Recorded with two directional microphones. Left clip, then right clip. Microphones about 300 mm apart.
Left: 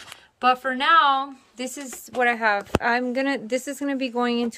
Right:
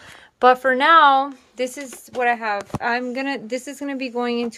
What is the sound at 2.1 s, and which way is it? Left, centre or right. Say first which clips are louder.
A woman's voice: even; centre.